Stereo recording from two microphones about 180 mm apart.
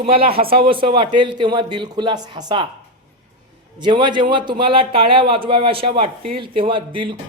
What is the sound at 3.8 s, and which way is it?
Speech, 25° right (ahead or behind).